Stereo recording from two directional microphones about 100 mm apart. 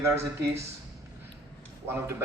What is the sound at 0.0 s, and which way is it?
Speech, 30° right (ahead or behind).